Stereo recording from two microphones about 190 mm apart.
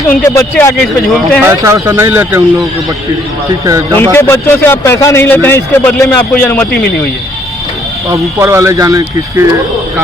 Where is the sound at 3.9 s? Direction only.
10° left (ahead or behind).